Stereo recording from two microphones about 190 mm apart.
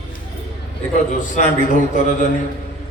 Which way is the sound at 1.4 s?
40° left (ahead or behind).